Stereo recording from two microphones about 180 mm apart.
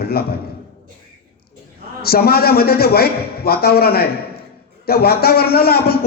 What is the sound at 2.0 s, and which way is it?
A man's voice, 60° left (ahead or behind).